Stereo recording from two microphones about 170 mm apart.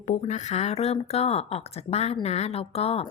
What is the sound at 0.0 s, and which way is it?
A woman's voice, 45° left (ahead or behind).